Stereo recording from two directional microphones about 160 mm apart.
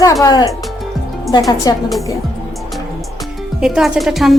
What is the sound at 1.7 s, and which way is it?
Speech, 25° left (ahead or behind).